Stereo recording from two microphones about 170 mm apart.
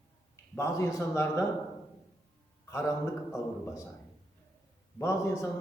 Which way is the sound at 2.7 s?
15° left (ahead or behind).